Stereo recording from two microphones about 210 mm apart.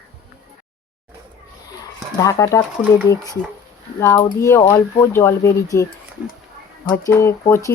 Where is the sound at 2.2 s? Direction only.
15° left (ahead or behind).